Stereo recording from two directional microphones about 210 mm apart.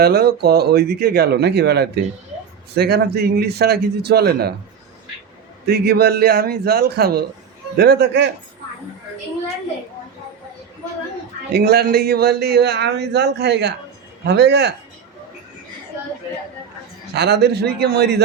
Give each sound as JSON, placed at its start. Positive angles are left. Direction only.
{"t": 0.0, "sound": "speech", "side_deg": -50}
{"t": 5.6, "sound": "speech", "side_deg": -50}
{"t": 11.5, "sound": "speech", "side_deg": -50}
{"t": 17.2, "sound": "speech", "side_deg": -50}